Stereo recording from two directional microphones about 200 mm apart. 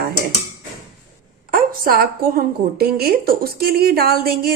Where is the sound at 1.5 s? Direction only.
45° right (ahead or behind).